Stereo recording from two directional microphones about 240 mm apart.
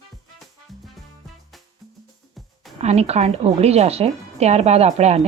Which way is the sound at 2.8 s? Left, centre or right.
Right.